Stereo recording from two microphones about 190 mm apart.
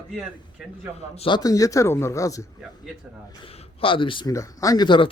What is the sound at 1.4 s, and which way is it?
Speech, 20° left (ahead or behind).